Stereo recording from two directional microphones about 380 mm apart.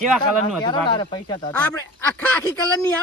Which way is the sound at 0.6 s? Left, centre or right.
Centre.